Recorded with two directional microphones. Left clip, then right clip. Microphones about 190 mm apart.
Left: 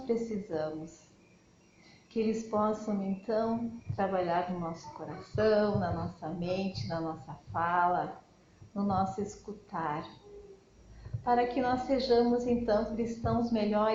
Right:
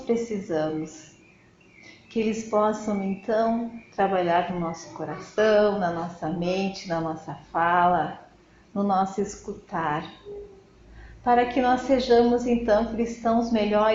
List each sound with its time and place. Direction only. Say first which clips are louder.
0.1 s speech: right 7 dB; 40° right (ahead or behind)
2.0 s speech: right 5 dB; 40° right (ahead or behind)
11.2 s speech: right 7 dB; 40° right (ahead or behind)